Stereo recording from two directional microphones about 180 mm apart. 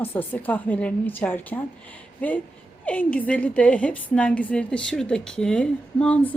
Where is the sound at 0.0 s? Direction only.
10° left (ahead or behind).